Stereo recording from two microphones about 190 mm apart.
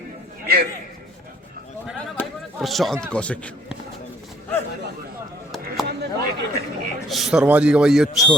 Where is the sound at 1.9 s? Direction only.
Centre (ahead or behind).